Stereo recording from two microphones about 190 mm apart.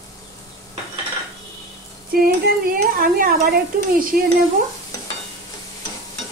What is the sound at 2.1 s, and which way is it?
Speech, 50° right (ahead or behind).